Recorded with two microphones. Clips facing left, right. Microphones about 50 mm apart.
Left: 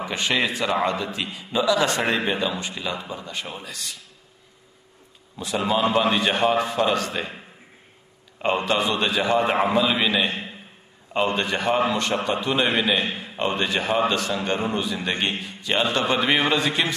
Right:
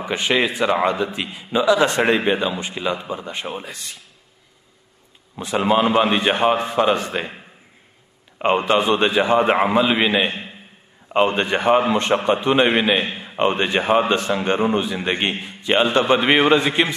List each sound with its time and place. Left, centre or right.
0.0 s a man's voice: right
5.3 s a man's voice: right
8.4 s a man's voice: right